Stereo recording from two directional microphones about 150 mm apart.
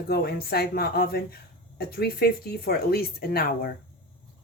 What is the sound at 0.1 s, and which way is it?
Speech, 90° left.